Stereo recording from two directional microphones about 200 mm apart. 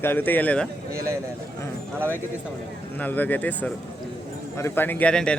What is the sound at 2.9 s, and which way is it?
A man's voice, 10° left (ahead or behind).